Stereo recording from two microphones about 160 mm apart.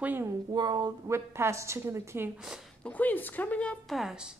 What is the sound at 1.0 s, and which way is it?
A woman's voice, 15° right (ahead or behind).